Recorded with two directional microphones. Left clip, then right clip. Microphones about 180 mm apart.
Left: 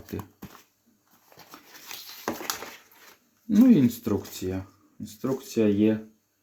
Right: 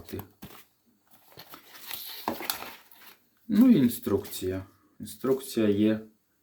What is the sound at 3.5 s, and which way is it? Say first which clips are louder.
Speech: left 2 dB; 35° left (ahead or behind).